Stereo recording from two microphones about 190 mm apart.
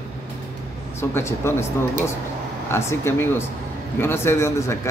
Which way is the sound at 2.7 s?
15° left (ahead or behind).